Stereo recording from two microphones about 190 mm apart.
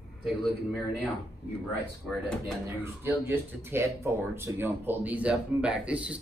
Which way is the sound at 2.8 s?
10° right (ahead or behind).